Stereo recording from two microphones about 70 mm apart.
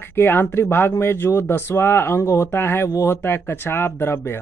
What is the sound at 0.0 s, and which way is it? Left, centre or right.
Speech, left.